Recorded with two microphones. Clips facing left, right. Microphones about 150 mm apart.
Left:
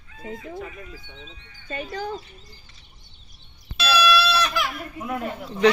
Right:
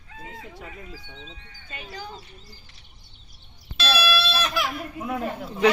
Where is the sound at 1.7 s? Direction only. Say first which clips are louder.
Left 8 dB; 50° left (ahead or behind).